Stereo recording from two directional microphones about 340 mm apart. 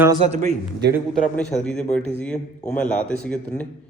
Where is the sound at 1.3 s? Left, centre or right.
Centre.